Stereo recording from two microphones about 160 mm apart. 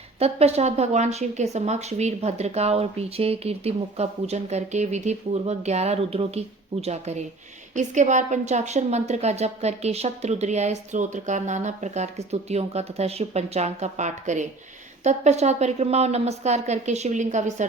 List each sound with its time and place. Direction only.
0.2 s a woman's voice: 40° right (ahead or behind)